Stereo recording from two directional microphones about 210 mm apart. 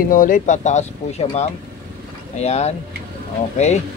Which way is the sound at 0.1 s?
40° left (ahead or behind).